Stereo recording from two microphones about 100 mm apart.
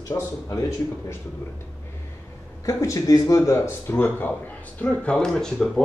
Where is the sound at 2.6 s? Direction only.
30° left (ahead or behind).